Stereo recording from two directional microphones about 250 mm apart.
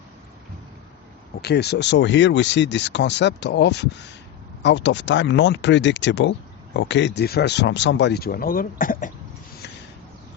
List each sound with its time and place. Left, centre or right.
1.4 s speech: left